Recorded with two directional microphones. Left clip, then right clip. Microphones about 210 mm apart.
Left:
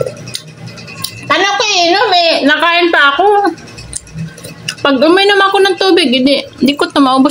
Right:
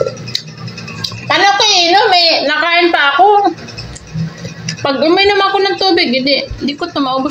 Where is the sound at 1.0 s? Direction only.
40° left (ahead or behind).